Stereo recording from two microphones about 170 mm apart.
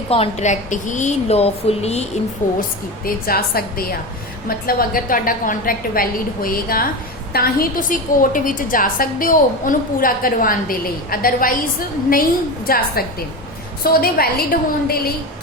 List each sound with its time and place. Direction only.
0.1 s a woman's voice: 40° left (ahead or behind)
2.6 s a woman's voice: 60° left (ahead or behind)
12.6 s a woman's voice: 60° left (ahead or behind)